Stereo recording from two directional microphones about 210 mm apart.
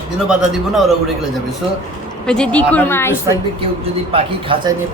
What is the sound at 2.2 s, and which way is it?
Speech, 5° left (ahead or behind).